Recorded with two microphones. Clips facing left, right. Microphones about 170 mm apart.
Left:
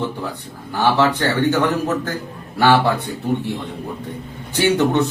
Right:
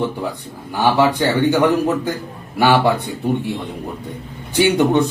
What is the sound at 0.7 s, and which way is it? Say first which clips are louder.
A man's voice: right 1 dB; 10° right (ahead or behind).